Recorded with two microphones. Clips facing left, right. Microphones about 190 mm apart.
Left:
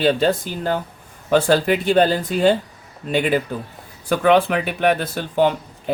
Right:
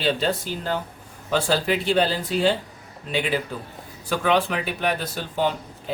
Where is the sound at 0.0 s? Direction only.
50° left (ahead or behind).